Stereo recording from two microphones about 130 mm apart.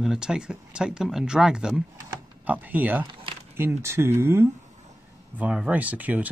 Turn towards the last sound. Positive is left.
turn(degrees=-10)  # may be behind; listen again after turning